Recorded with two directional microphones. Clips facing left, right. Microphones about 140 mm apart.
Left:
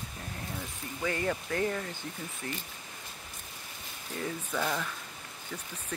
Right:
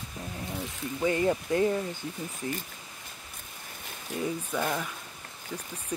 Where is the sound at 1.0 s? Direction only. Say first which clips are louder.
Right 6 dB; 20° right (ahead or behind).